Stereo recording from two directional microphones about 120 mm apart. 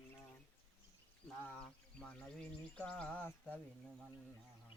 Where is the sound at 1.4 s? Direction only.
15° left (ahead or behind).